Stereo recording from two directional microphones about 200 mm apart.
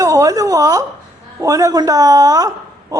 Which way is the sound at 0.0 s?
15° right (ahead or behind).